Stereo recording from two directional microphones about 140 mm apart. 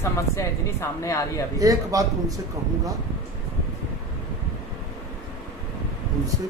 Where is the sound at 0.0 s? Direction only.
20° left (ahead or behind).